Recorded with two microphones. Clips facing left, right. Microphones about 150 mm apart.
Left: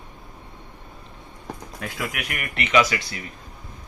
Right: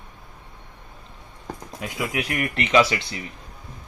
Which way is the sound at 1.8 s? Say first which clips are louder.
Right 3 dB; 20° right (ahead or behind).